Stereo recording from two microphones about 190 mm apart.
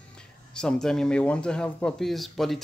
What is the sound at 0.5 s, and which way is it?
Speech, 5° left (ahead or behind).